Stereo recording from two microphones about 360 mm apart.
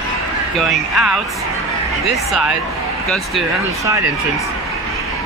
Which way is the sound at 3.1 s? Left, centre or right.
Centre.